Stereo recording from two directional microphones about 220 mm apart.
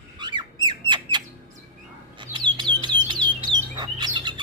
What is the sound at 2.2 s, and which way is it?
Bird, 20° right (ahead or behind).